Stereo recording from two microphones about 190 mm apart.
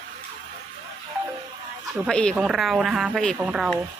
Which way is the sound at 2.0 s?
5° left (ahead or behind).